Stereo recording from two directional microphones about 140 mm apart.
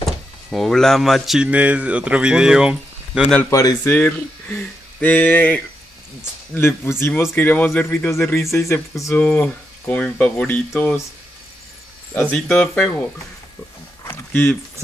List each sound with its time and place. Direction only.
0.0 s speech: centre (ahead or behind)
3.3 s speech: 10° left (ahead or behind)
3.5 s speech: 25° left (ahead or behind)
3.9 s speech: 10° left (ahead or behind)
12.2 s speech: 5° left (ahead or behind)
14.1 s a sound: 10° left (ahead or behind)